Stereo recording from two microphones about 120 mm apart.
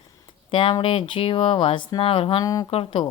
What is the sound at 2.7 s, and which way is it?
Speech, 55° left (ahead or behind).